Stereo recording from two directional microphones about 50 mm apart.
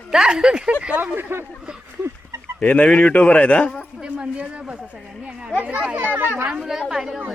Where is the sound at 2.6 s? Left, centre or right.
Left.